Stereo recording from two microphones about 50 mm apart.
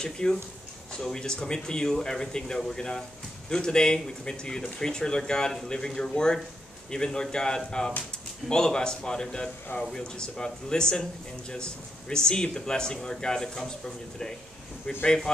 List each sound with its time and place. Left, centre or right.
0.0 s speech: centre